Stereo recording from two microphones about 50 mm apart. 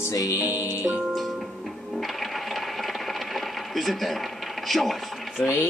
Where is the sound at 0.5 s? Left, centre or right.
Left.